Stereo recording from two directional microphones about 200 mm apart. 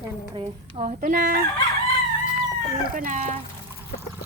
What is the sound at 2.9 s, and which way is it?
Speech, 40° right (ahead or behind).